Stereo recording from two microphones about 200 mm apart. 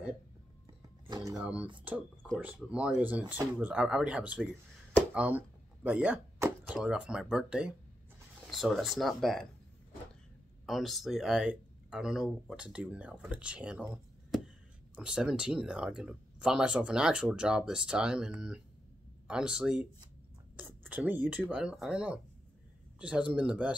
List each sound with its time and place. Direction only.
1.0 s a sound: 15° right (ahead or behind)
1.4 s speech: 5° right (ahead or behind)
10.7 s speech: centre (ahead or behind)